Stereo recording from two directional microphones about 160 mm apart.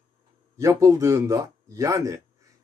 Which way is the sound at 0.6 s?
20° right (ahead or behind).